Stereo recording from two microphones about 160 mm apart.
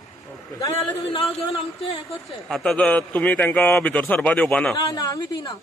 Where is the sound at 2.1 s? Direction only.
5° left (ahead or behind).